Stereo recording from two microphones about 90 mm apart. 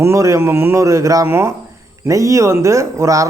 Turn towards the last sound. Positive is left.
turn(degrees=-35)  # may be behind; listen again after turning